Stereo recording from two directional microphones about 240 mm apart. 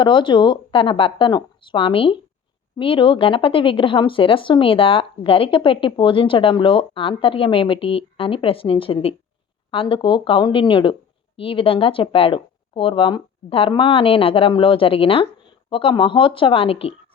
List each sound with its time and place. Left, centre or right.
0.0 s speech: centre